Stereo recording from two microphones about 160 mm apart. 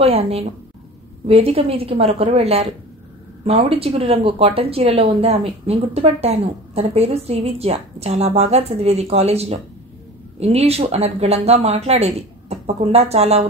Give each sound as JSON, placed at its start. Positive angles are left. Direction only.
{"t": 0.0, "sound": "speech", "side_deg": -40}